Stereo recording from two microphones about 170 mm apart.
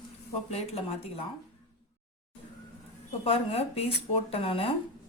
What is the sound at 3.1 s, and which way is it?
Speech, 35° left (ahead or behind).